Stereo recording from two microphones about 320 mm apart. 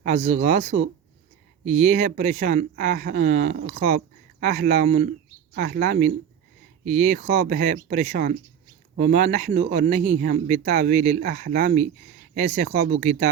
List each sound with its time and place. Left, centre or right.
0.0 s speech: right